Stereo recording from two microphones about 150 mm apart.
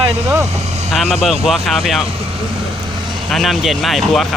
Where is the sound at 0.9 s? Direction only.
Centre (ahead or behind).